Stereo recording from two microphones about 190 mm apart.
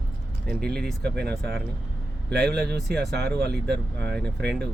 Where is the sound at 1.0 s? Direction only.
60° right (ahead or behind).